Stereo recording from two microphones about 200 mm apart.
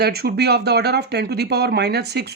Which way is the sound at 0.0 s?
50° right (ahead or behind).